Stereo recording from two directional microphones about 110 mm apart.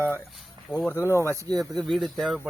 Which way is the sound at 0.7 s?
5° left (ahead or behind).